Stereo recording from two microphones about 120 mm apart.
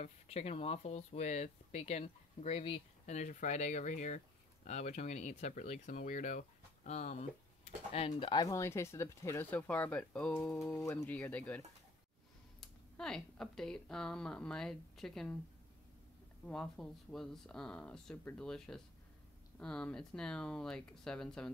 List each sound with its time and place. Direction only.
0.0 s speech: 65° left (ahead or behind)
3.1 s speech: 80° left
4.6 s speech: 70° left (ahead or behind)
7.6 s speech: 55° left (ahead or behind)
8.4 s speech: 25° left (ahead or behind)
10.7 s speech: 25° left (ahead or behind)
11.1 s speech: 10° left (ahead or behind)
16.4 s speech: 5° left (ahead or behind)